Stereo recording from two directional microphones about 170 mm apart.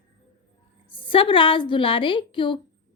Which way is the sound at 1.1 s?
30° left (ahead or behind).